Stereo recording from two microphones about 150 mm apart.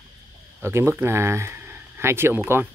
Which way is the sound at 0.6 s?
15° right (ahead or behind).